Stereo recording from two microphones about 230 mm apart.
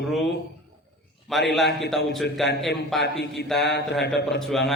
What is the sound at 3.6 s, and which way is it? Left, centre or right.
Speech, left.